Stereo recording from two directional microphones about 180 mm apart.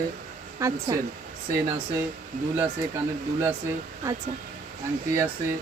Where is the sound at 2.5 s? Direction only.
10° right (ahead or behind).